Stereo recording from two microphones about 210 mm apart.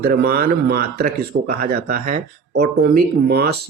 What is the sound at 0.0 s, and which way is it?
Speech, 45° right (ahead or behind).